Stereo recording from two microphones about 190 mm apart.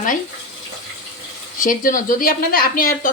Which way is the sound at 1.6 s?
45° left (ahead or behind).